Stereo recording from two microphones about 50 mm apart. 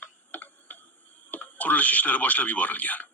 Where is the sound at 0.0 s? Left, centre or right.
Left.